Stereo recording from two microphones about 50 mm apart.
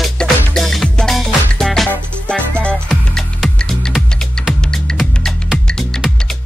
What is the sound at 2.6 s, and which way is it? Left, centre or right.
Music, centre.